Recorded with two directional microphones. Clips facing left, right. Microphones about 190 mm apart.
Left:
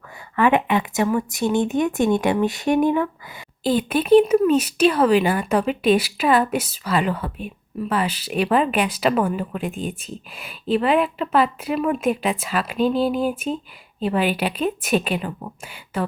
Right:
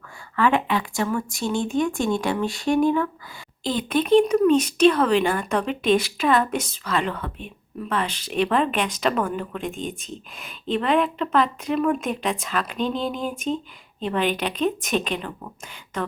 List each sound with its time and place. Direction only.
0.3 s speech: 20° left (ahead or behind)
3.6 s speech: 10° left (ahead or behind)